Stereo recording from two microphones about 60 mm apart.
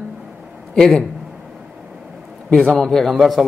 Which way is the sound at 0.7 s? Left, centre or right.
Centre.